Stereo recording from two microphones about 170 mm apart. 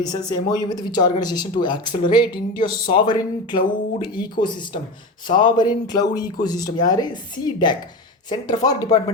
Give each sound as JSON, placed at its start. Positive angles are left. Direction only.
{"t": 0.0, "sound": "speech", "side_deg": 25}